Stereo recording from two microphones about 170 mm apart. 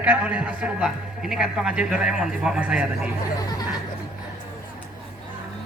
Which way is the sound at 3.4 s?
25° left (ahead or behind).